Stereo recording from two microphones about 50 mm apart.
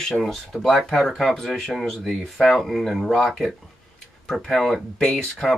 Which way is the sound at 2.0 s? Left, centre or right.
Centre.